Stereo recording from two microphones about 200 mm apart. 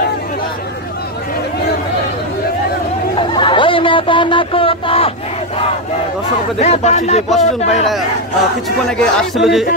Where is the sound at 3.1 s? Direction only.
25° left (ahead or behind).